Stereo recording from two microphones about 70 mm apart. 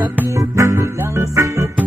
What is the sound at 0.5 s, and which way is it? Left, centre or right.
Music, right.